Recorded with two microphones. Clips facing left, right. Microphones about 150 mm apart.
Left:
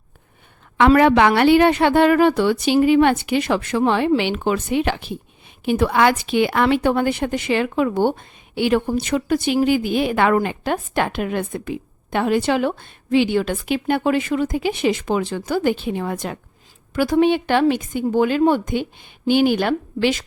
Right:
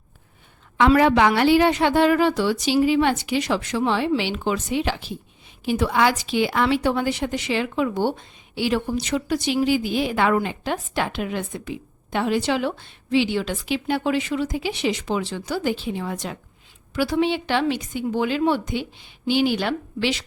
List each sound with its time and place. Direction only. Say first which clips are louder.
0.8 s a woman's voice: left 3 dB; 60° left (ahead or behind)